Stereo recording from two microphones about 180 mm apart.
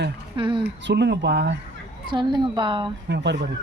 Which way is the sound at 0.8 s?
75° right (ahead or behind).